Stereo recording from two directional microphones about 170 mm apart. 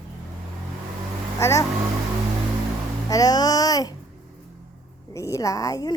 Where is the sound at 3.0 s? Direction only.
20° left (ahead or behind).